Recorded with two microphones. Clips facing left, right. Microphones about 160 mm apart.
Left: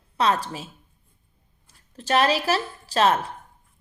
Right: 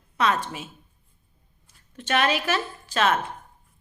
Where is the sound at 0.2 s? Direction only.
35° left (ahead or behind).